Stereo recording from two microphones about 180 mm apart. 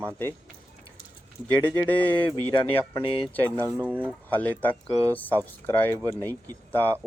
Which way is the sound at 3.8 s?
10° right (ahead or behind).